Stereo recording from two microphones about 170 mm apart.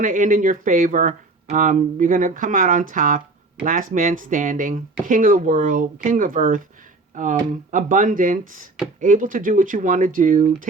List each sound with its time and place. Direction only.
0.0 s speech: 50° right (ahead or behind)